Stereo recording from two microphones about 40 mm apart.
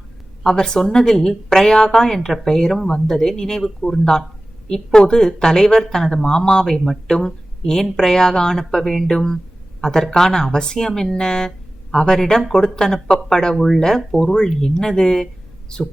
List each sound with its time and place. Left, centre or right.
0.4 s a woman's voice: centre